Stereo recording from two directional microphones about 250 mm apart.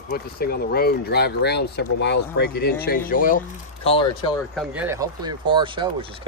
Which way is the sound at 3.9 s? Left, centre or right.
Left.